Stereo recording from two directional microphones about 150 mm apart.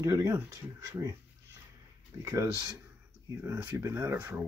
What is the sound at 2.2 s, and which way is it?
Speech, 20° right (ahead or behind).